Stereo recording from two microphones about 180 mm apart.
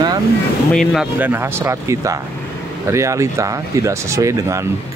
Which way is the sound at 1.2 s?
15° right (ahead or behind).